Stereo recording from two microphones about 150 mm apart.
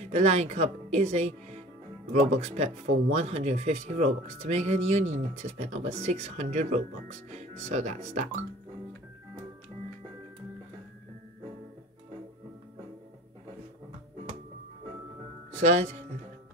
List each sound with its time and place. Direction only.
0.1 s speech: 45° right (ahead or behind)
15.6 s speech: 50° right (ahead or behind)